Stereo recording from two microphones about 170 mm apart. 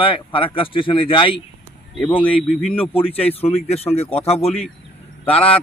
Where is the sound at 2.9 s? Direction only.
35° left (ahead or behind).